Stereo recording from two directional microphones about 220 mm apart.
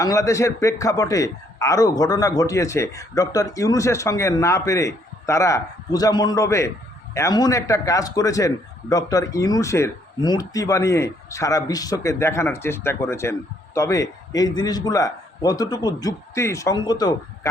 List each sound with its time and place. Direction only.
0.0 s a man's voice: 15° left (ahead or behind)